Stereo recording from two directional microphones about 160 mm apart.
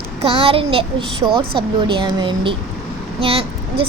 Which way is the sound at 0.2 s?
35° right (ahead or behind).